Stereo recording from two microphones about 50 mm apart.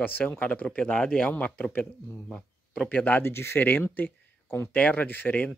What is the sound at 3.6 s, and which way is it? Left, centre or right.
Speech, left.